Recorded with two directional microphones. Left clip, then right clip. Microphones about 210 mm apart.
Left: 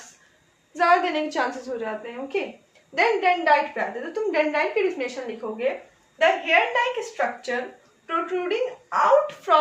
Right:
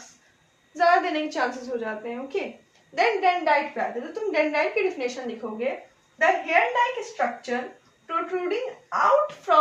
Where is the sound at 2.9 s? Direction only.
30° left (ahead or behind).